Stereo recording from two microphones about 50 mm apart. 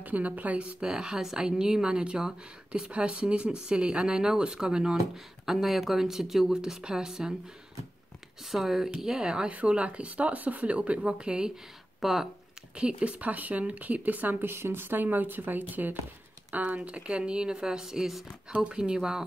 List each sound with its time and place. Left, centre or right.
0.0 s speech: right
0.7 s speech: centre
2.9 s speech: right
8.5 s speech: centre
9.5 s speech: right
12.0 s speech: centre
12.7 s speech: right
14.4 s speech: right; by 18.2 s centre
18.5 s speech: centre